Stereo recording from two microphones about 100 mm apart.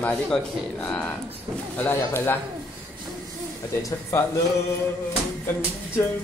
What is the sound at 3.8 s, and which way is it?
Speech, 30° left (ahead or behind).